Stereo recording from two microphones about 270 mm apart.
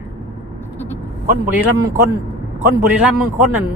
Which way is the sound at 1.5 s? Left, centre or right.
Centre.